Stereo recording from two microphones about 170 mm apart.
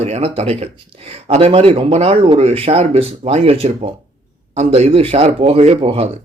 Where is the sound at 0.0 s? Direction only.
40° right (ahead or behind).